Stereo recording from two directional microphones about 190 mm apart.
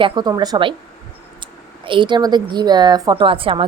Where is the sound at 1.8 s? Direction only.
25° right (ahead or behind).